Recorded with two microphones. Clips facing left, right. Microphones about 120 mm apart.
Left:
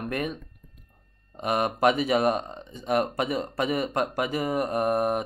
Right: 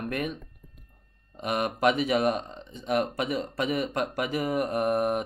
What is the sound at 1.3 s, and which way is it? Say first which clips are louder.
Speech: left 3 dB; 40° left (ahead or behind).